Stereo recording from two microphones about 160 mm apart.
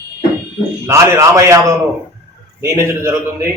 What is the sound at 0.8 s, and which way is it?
Speech, 15° right (ahead or behind).